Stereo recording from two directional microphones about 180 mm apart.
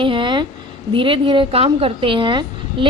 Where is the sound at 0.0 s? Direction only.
30° right (ahead or behind).